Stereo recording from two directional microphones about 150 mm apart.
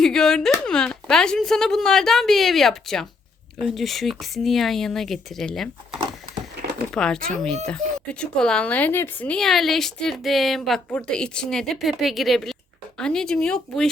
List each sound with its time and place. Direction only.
0.0 s speech: 5° left (ahead or behind)